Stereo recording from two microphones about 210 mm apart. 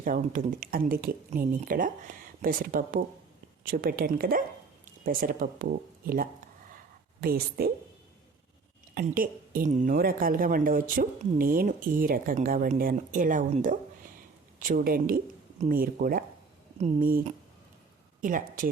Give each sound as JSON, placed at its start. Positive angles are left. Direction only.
{"t": 0.0, "sound": "a woman's voice", "side_deg": -40}
{"t": 9.0, "sound": "a woman's voice", "side_deg": -40}